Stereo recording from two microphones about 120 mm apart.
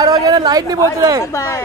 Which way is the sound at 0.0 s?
30° right (ahead or behind).